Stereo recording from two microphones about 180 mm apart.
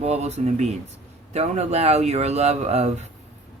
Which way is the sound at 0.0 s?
35° right (ahead or behind).